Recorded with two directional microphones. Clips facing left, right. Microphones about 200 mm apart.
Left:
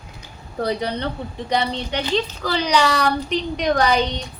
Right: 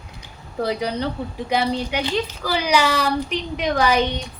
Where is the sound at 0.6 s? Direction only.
5° right (ahead or behind).